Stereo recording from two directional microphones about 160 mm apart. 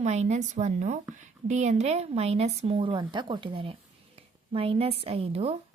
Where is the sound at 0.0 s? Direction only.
45° right (ahead or behind).